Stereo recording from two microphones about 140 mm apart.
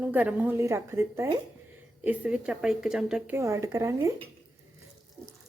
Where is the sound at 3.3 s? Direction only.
20° right (ahead or behind).